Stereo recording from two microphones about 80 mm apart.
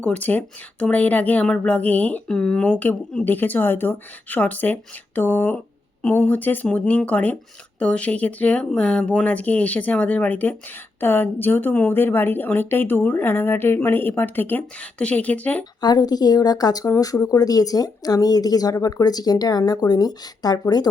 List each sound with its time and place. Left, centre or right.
0.0 s a woman's voice: centre
15.8 s speech: left